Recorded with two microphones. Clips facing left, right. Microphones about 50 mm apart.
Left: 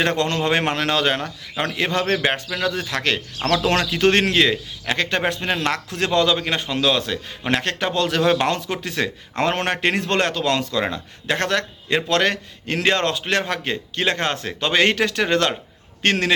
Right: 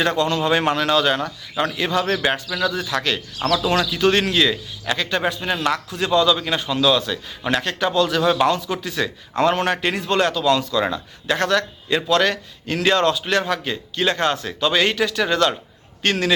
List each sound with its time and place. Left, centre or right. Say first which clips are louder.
0.0 s speech: right 1 dB; left
6.2 s speech: right 1 dB; left
10.8 s a man's voice: right 2 dB; left